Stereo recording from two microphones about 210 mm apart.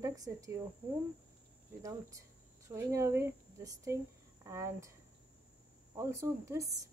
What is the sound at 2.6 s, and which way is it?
Speech, 15° right (ahead or behind).